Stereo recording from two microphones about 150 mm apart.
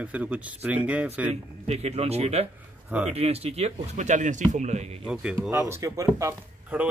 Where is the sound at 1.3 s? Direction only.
45° right (ahead or behind).